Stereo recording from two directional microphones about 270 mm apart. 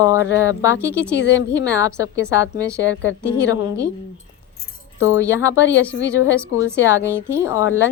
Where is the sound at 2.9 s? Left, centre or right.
Left.